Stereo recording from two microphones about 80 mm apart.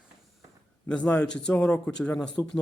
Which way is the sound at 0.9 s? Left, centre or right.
Centre.